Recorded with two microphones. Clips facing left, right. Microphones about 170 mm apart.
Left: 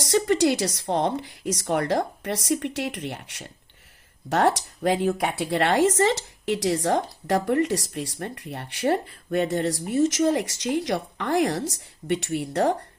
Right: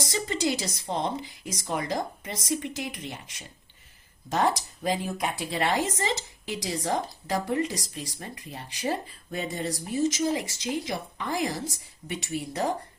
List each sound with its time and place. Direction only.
0.1 s speech: 70° left (ahead or behind)